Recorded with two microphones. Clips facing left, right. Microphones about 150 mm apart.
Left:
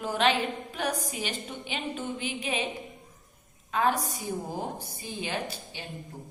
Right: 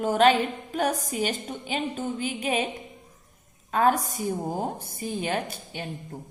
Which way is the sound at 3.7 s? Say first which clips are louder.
Right 4 dB; 45° right (ahead or behind).